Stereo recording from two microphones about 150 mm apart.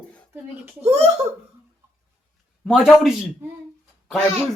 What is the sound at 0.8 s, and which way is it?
Speech, 45° right (ahead or behind).